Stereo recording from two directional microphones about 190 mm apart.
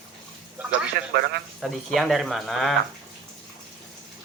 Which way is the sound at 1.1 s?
55° right (ahead or behind).